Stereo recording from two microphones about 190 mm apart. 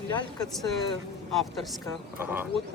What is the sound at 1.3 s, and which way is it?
Speech, centre (ahead or behind).